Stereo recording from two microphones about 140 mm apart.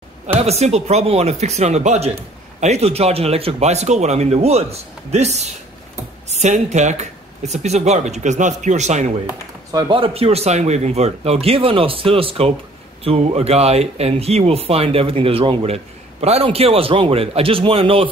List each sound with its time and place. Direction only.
0.4 s speech: 50° right (ahead or behind)
9.7 s speech: 25° right (ahead or behind)
9.9 s speech: 40° right (ahead or behind)